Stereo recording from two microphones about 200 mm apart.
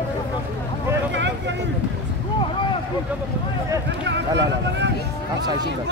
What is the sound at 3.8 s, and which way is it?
Speech, 60° right (ahead or behind).